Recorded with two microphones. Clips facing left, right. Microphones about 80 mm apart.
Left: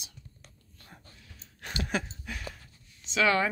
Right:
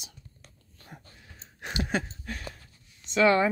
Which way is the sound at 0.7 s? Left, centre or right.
Right.